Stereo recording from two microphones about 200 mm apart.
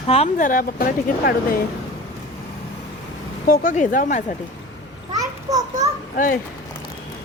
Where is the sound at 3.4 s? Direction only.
45° left (ahead or behind).